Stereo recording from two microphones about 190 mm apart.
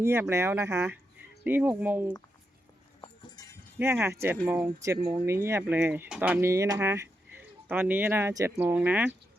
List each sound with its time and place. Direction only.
0.0 s speech: 15° right (ahead or behind)
3.0 s music: 20° left (ahead or behind)
3.8 s speech: 10° right (ahead or behind)